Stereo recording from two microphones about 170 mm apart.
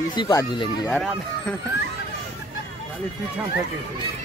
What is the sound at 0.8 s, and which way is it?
Speech, 5° left (ahead or behind).